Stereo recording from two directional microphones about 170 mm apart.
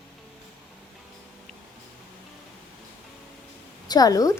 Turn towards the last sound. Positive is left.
turn(degrees=20)  # may be behind; listen again after turning